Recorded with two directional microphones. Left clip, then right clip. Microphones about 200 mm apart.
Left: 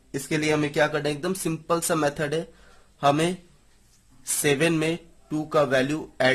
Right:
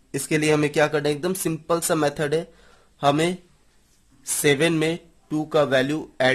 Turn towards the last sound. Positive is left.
turn(degrees=-15)  # may be behind; listen again after turning